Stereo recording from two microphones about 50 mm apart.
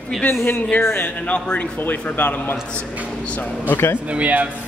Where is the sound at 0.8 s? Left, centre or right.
Left.